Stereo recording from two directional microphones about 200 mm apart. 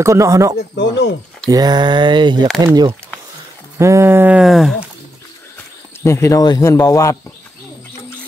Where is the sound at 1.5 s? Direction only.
20° right (ahead or behind); by 4.8 s centre (ahead or behind).